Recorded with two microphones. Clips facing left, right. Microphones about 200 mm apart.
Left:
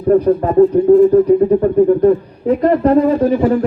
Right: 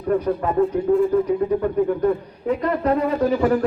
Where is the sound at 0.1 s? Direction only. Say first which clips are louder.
Left 9 dB; 40° left (ahead or behind).